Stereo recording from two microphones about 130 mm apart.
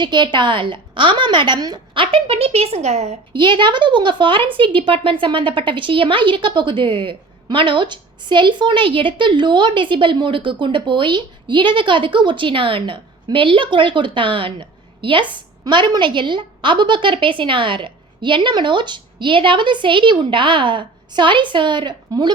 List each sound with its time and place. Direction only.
0.0 s speech: 35° right (ahead or behind); by 3.2 s 55° right (ahead or behind)
3.3 s speech: 35° right (ahead or behind)